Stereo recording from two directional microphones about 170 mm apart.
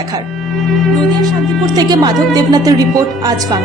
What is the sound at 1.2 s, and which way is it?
A woman's voice, 25° right (ahead or behind).